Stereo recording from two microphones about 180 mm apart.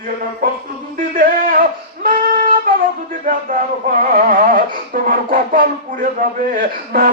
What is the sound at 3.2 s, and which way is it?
Speech, 50° right (ahead or behind).